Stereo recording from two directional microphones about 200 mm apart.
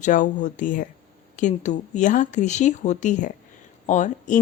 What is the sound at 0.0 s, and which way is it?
Speech, 40° left (ahead or behind).